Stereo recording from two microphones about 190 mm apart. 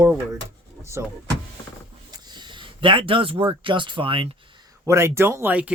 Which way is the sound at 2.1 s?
25° right (ahead or behind).